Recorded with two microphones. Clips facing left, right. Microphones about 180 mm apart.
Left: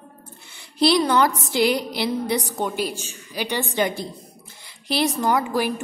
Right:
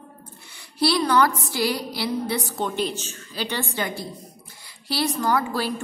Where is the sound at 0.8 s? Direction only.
20° left (ahead or behind).